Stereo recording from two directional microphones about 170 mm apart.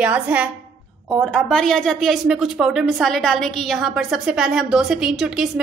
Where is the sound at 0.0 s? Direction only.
10° right (ahead or behind).